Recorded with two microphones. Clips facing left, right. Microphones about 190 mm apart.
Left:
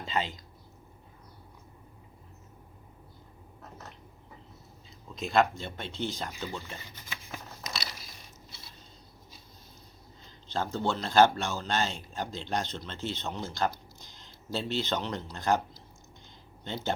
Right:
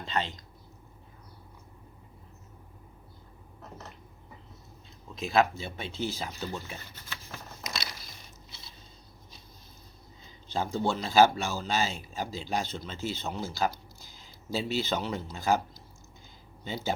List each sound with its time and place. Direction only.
0.0 s speech: 5° left (ahead or behind)
5.1 s speech: centre (ahead or behind)
6.7 s a sound: 10° left (ahead or behind)
10.2 s speech: 10° right (ahead or behind)
16.6 s speech: 5° right (ahead or behind)